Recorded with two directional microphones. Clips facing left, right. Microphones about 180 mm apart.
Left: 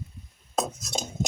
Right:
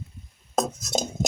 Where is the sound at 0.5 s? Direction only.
40° right (ahead or behind).